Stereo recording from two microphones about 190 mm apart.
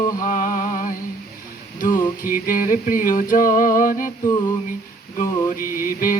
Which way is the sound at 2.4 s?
45° left (ahead or behind).